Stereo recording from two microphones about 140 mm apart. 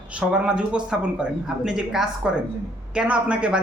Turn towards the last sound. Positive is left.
turn(degrees=-10)  # may be behind; listen again after turning